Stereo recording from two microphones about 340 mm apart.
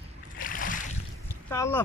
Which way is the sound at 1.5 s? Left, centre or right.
Centre.